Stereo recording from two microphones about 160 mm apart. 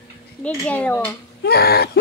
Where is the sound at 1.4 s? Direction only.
80° left.